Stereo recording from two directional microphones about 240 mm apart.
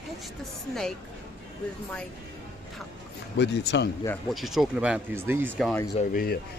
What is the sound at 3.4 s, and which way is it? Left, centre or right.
Speech, left.